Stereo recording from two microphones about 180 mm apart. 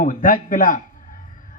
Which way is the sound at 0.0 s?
50° left (ahead or behind).